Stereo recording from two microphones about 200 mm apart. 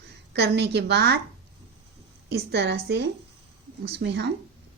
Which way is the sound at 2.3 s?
55° right (ahead or behind).